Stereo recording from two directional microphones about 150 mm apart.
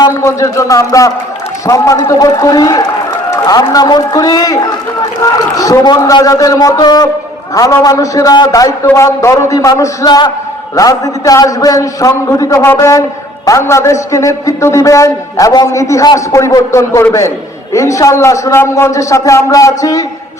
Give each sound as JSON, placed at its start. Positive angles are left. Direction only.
{"t": 0.1, "sound": "a man's voice", "side_deg": 20}